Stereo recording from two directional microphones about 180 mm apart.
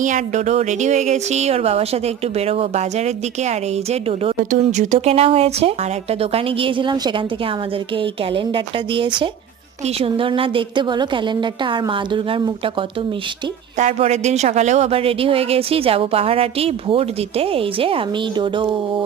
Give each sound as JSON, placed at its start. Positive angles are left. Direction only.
{"t": 0.0, "sound": "a woman's voice", "side_deg": -45}
{"t": 13.7, "sound": "speech", "side_deg": -40}